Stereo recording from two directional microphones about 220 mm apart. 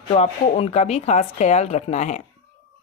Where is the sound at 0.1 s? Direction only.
30° left (ahead or behind).